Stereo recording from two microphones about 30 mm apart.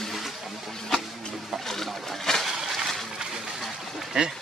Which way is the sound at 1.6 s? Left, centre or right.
Centre.